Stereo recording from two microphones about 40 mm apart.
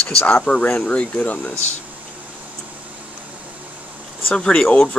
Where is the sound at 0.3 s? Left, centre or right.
Left.